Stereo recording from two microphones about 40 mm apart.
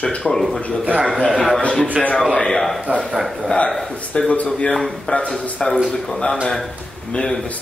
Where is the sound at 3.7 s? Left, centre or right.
Centre.